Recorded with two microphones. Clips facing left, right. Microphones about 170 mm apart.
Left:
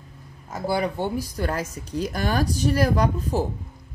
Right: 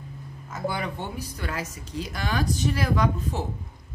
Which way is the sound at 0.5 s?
35° left (ahead or behind).